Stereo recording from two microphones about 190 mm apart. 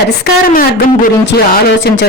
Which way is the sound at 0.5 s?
50° left (ahead or behind).